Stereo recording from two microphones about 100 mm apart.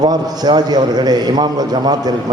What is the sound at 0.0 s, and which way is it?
A man's voice, 45° right (ahead or behind).